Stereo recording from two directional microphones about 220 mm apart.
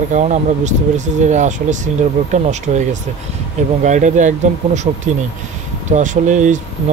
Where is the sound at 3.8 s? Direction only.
35° right (ahead or behind).